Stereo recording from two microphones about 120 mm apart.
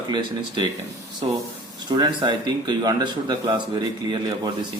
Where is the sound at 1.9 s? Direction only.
35° right (ahead or behind).